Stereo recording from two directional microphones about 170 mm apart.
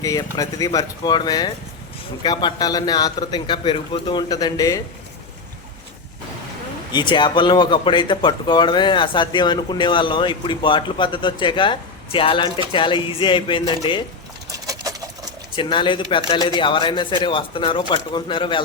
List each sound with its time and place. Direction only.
0.0 s speech: 20° left (ahead or behind)
6.9 s speech: 30° left (ahead or behind)
14.5 s sewing machine: 20° right (ahead or behind)
15.5 s speech: 30° left (ahead or behind)